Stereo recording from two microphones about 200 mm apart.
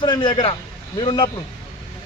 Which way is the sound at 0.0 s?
25° left (ahead or behind).